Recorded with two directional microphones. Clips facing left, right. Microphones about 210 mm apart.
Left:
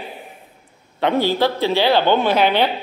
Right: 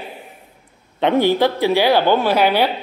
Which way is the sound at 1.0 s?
20° right (ahead or behind).